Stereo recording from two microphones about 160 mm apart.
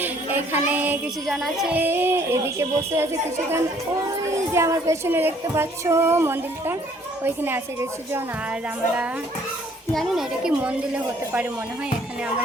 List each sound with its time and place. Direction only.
0.0 s a sound: 10° right (ahead or behind)
1.4 s music: centre (ahead or behind)
1.7 s a woman's voice: 15° right (ahead or behind)
9.9 s a woman's voice: centre (ahead or behind)